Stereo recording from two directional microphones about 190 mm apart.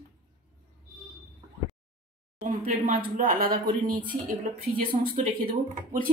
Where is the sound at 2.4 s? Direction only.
45° right (ahead or behind).